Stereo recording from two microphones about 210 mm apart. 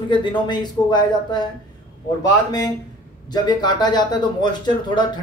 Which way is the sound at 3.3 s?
20° left (ahead or behind).